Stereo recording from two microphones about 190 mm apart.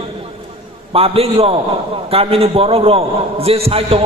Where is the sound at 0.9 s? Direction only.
30° right (ahead or behind).